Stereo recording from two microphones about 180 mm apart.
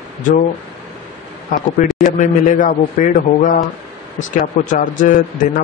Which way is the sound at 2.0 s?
40° left (ahead or behind).